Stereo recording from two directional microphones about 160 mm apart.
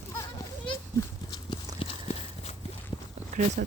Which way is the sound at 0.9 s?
25° left (ahead or behind).